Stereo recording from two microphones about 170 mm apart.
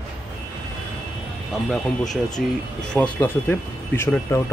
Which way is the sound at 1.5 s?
Centre (ahead or behind).